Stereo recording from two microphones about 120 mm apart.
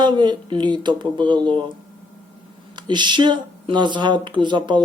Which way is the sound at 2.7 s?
40° right (ahead or behind).